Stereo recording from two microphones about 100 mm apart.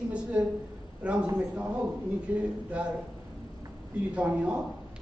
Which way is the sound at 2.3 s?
15° right (ahead or behind).